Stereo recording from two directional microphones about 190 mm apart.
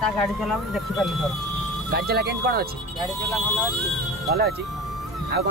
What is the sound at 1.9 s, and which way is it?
Speech, 55° right (ahead or behind).